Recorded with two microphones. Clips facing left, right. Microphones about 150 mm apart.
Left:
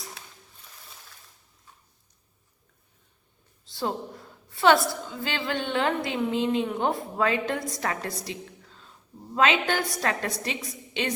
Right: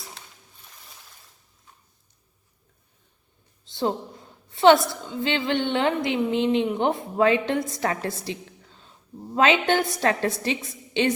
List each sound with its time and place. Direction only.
4.4 s a woman's voice: 20° right (ahead or behind)